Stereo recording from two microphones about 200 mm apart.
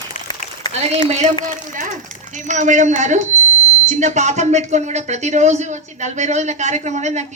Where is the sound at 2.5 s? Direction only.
40° right (ahead or behind).